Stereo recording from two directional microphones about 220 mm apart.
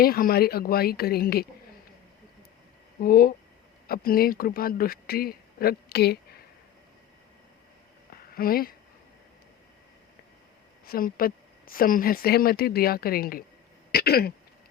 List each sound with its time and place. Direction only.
0.0 s speech: 45° left (ahead or behind)
3.0 s speech: 40° left (ahead or behind)
8.4 s speech: 40° left (ahead or behind)
10.8 s speech: 40° left (ahead or behind)
13.9 s throat clearing: 45° left (ahead or behind)